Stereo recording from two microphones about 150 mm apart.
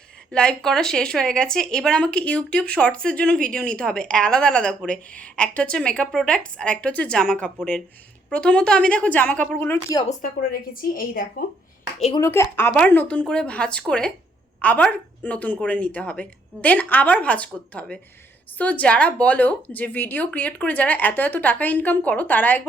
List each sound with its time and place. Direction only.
0.3 s speech: 5° left (ahead or behind)
10.1 s a woman's voice: 65° left (ahead or behind)
12.2 s speech: 15° left (ahead or behind)